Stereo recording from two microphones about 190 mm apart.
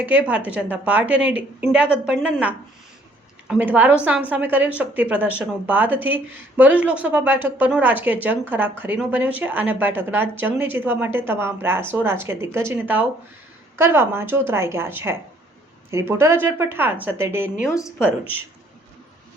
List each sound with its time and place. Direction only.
0.0 s speech: 10° right (ahead or behind)
17.7 s a woman's voice: 15° left (ahead or behind)